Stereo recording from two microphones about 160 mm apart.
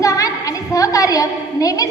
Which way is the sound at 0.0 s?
20° left (ahead or behind).